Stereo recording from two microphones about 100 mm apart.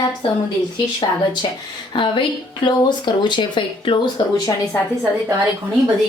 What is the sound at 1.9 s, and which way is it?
Speech, 55° left (ahead or behind).